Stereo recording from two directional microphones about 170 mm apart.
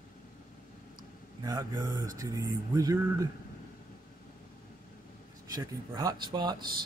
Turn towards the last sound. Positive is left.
turn(degrees=-25)  # may be behind; listen again after turning